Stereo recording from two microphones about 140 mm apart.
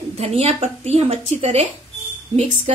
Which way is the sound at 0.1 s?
50° right (ahead or behind).